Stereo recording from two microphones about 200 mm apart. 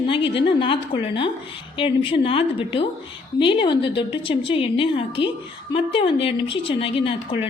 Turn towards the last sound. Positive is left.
turn(degrees=25)  # may be behind; listen again after turning